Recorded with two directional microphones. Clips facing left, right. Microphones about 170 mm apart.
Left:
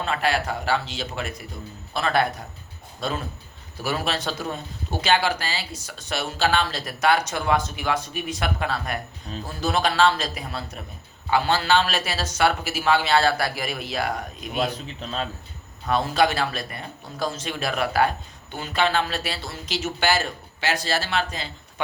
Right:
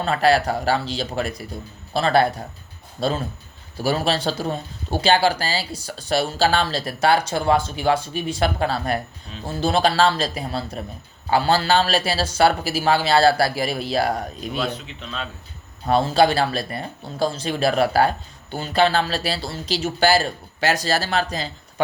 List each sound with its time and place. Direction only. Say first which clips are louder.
0.0 s speech: right 6 dB; 35° right (ahead or behind)
14.6 s a man's voice: left 3 dB; 35° left (ahead or behind)
15.9 s speech: right 4 dB; 30° right (ahead or behind)